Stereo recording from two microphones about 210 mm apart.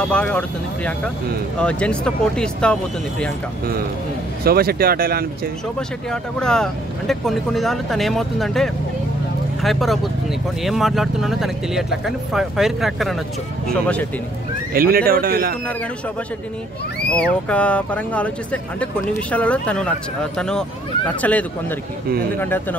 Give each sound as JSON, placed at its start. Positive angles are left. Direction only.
{"t": 0.1, "sound": "speech", "side_deg": 5}
{"t": 4.5, "sound": "speech", "side_deg": -45}
{"t": 5.8, "sound": "speech", "side_deg": 5}
{"t": 14.7, "sound": "speech", "side_deg": -45}
{"t": 17.1, "sound": "speech", "side_deg": 5}